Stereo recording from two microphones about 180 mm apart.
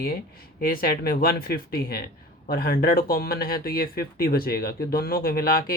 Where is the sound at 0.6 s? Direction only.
55° left (ahead or behind).